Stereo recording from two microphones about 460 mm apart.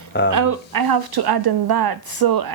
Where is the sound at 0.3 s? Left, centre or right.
Right.